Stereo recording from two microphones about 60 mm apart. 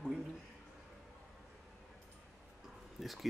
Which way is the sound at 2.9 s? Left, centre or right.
Centre.